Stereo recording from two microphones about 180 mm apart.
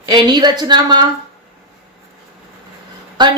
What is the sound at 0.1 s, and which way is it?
Speech, 25° right (ahead or behind).